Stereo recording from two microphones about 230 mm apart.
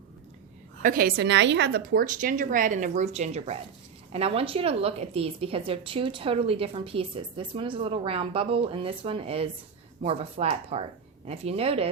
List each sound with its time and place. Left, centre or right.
0.8 s a woman's voice: right